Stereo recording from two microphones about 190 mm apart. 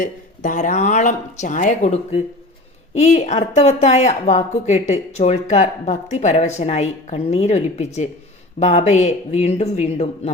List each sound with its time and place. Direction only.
0.0 s speech: 40° left (ahead or behind)